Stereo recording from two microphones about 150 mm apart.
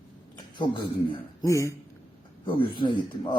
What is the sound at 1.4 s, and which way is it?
Speech, 20° left (ahead or behind).